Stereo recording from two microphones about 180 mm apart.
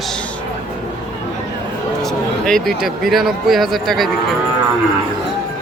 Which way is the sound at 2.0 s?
Centre (ahead or behind).